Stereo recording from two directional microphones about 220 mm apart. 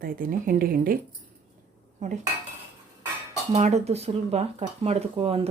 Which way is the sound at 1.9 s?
35° right (ahead or behind).